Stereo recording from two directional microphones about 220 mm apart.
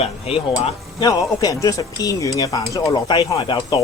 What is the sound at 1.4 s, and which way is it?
Speech, 15° left (ahead or behind).